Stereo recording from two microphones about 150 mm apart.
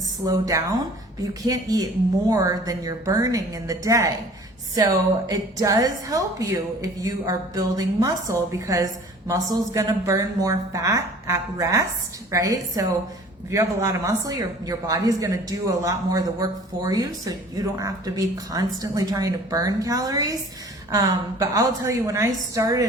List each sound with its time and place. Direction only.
0.3 s speech: 25° right (ahead or behind)